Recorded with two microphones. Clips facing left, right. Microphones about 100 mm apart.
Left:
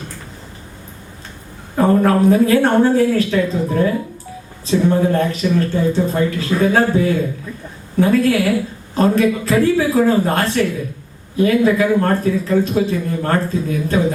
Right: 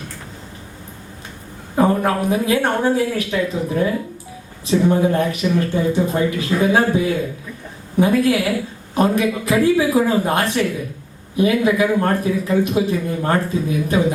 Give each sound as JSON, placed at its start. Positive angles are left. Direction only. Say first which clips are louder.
{"t": 1.7, "sound": "speech", "louder": "left 3 dB", "side_deg": -15}